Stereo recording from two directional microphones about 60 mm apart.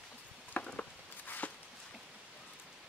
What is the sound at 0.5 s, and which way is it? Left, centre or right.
Patter, centre.